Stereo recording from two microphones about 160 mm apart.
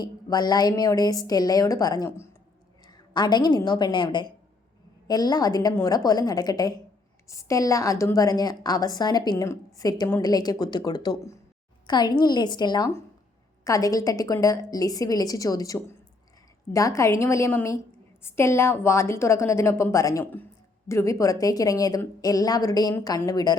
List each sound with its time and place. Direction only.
0.0 s a woman's voice: 25° left (ahead or behind)